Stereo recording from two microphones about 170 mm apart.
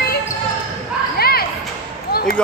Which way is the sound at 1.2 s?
65° left (ahead or behind).